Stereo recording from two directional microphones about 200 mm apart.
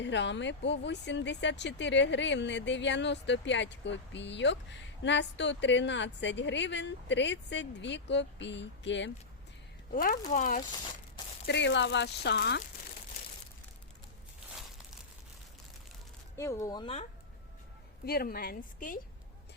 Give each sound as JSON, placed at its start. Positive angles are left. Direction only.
{"t": 0.0, "sound": "speech", "side_deg": 60}
{"t": 9.9, "sound": "a woman's voice", "side_deg": 45}
{"t": 11.4, "sound": "speech", "side_deg": 60}
{"t": 16.4, "sound": "speech", "side_deg": 15}
{"t": 18.0, "sound": "a woman's voice", "side_deg": 50}